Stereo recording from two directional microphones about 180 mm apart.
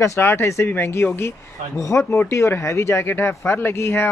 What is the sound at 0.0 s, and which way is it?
Speech, 15° left (ahead or behind).